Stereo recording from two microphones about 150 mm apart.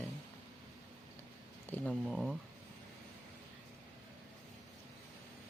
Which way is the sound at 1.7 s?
10° left (ahead or behind).